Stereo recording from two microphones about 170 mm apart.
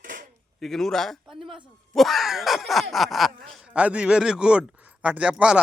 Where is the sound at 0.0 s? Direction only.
50° right (ahead or behind).